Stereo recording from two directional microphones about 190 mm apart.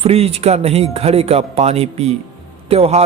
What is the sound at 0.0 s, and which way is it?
A man's voice, 30° right (ahead or behind).